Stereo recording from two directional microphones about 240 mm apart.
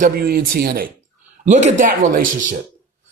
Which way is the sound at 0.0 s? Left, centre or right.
Right.